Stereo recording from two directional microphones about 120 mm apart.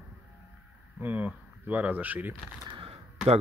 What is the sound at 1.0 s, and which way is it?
Speech, 15° right (ahead or behind).